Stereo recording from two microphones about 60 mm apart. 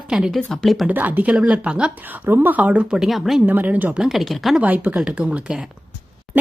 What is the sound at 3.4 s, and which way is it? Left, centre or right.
Speech, right.